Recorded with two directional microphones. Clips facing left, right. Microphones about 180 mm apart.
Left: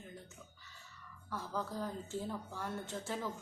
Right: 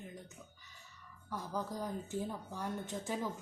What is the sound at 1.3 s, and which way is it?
A woman's voice, 15° right (ahead or behind).